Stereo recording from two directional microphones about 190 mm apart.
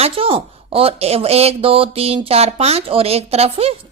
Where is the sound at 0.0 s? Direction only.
30° right (ahead or behind).